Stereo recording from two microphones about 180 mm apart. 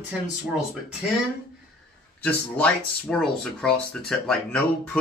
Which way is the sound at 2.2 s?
5° left (ahead or behind).